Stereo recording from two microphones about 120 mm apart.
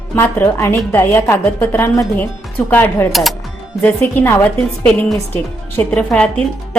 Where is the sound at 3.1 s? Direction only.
Centre (ahead or behind).